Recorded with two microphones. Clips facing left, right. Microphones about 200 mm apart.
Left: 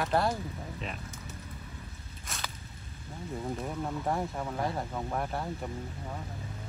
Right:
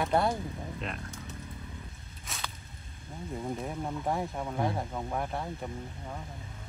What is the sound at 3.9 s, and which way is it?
Speech, centre (ahead or behind).